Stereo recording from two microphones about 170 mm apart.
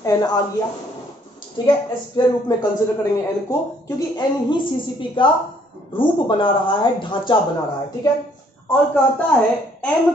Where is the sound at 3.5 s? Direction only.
20° left (ahead or behind).